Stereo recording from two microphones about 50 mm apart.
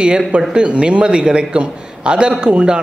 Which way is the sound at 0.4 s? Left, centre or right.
Centre.